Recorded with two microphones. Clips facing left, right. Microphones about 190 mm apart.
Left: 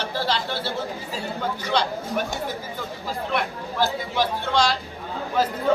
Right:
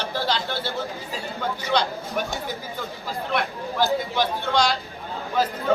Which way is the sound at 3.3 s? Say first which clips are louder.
Right 2 dB; centre (ahead or behind).